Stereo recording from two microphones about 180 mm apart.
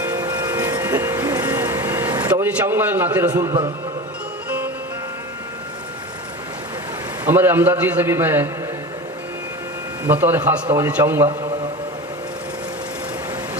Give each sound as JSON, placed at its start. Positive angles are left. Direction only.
{"t": 0.0, "sound": "train", "side_deg": -20}
{"t": 2.2, "sound": "a man's voice", "side_deg": -10}
{"t": 7.3, "sound": "a man's voice", "side_deg": -10}
{"t": 10.1, "sound": "a man's voice", "side_deg": -10}